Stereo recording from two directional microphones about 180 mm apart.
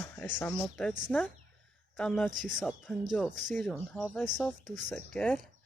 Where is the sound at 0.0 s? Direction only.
10° left (ahead or behind).